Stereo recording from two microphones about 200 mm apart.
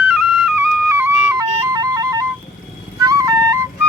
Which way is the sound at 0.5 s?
10° right (ahead or behind).